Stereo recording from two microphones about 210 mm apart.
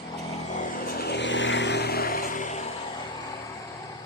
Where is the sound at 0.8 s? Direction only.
50° left (ahead or behind).